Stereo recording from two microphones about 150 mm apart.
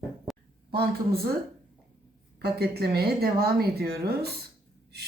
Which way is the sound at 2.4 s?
90° right.